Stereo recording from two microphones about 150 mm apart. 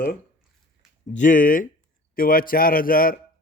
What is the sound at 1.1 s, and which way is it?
A man's voice, 60° left (ahead or behind).